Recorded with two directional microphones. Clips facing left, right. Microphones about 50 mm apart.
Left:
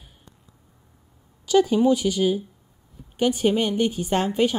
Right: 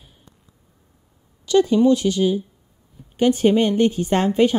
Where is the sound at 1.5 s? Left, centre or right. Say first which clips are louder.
Right 3 dB; centre.